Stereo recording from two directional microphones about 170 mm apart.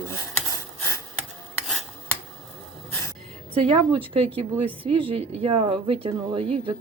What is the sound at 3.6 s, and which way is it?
Speech, 30° right (ahead or behind).